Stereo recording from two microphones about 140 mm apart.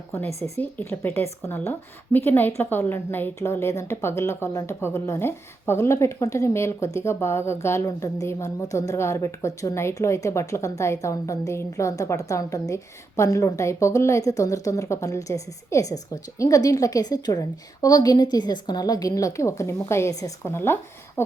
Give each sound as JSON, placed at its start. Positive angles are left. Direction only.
{"t": 0.3, "sound": "a woman's voice", "side_deg": -50}
{"t": 0.6, "sound": "a woman's voice", "side_deg": 15}
{"t": 21.2, "sound": "a sound", "side_deg": 15}